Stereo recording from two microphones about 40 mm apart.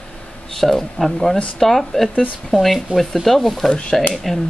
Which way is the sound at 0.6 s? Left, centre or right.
Centre.